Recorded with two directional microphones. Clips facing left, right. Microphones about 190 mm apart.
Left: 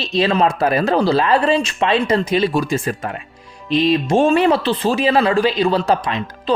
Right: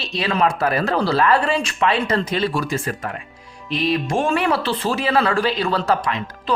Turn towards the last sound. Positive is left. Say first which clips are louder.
# left 3 dB
turn(degrees=20)  # may be behind; listen again after turning